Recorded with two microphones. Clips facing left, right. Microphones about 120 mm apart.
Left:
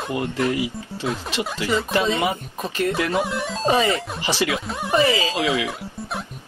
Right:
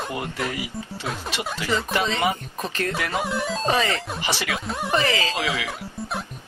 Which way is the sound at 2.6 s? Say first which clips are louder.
Left 4 dB; 15° left (ahead or behind).